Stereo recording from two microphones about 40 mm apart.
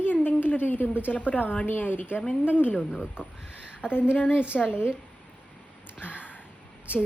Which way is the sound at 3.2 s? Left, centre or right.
Right.